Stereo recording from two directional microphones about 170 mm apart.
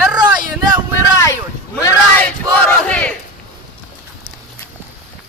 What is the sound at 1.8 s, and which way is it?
Battle cry, 10° left (ahead or behind).